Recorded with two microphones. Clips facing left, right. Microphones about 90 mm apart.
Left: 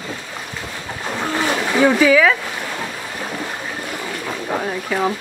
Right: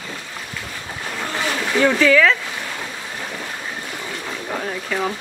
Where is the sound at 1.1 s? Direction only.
15° left (ahead or behind).